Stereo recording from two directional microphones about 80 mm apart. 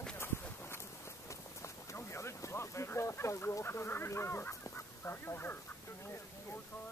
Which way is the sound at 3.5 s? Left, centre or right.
Left.